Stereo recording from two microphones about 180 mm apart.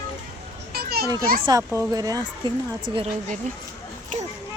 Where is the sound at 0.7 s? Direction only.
60° right (ahead or behind).